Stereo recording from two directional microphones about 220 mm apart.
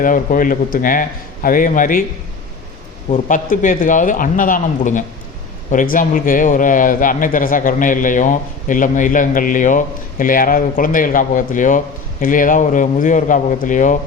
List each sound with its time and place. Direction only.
0.0 s speech: 35° left (ahead or behind)
3.1 s speech: 35° left (ahead or behind)